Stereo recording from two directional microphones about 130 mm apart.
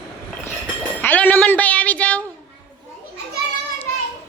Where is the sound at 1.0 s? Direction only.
10° left (ahead or behind).